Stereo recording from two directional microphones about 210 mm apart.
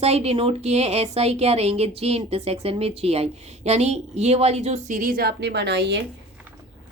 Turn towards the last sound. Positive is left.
turn(degrees=-55)  # may be behind; listen again after turning